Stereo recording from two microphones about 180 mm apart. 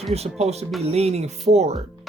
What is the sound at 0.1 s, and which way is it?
Speech, 35° right (ahead or behind).